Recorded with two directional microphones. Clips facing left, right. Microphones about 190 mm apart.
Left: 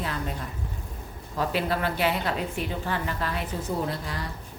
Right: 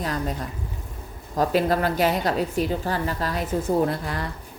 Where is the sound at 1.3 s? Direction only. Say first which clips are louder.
Right 6 dB; 40° right (ahead or behind).